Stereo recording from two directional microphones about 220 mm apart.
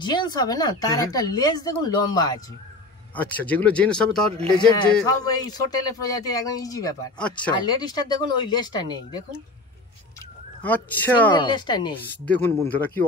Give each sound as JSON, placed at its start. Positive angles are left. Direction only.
{"t": 0.0, "sound": "speech", "side_deg": 20}
{"t": 3.2, "sound": "speech", "side_deg": 5}
{"t": 5.0, "sound": "speech", "side_deg": 15}
{"t": 7.5, "sound": "speech", "side_deg": 20}
{"t": 10.6, "sound": "speech", "side_deg": 5}
{"t": 11.3, "sound": "speech", "side_deg": 20}
{"t": 12.3, "sound": "speech", "side_deg": 10}